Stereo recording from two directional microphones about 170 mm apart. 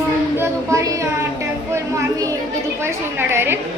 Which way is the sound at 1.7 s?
20° right (ahead or behind).